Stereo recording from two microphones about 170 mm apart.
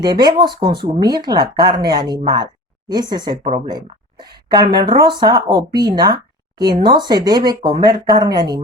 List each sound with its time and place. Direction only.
0.0 s speech: 25° right (ahead or behind)